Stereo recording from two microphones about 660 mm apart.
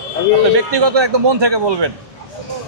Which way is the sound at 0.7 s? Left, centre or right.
Right.